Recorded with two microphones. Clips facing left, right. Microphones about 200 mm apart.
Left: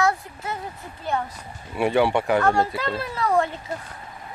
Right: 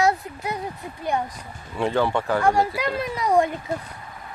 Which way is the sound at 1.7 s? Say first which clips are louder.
Left 2 dB; 10° left (ahead or behind).